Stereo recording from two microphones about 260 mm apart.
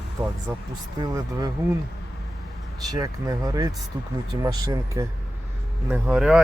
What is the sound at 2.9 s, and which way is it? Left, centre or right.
Speech, centre.